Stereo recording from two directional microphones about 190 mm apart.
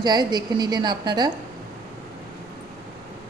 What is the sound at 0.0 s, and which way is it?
A woman's voice, 20° right (ahead or behind).